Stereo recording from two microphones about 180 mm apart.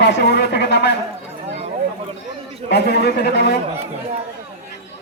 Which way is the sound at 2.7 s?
70° left (ahead or behind).